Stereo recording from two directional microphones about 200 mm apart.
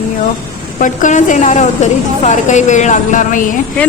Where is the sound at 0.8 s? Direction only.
40° left (ahead or behind).